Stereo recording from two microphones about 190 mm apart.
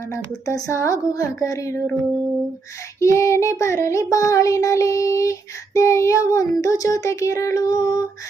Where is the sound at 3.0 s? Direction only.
15° left (ahead or behind).